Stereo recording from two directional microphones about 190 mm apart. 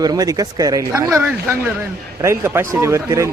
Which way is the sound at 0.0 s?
20° right (ahead or behind).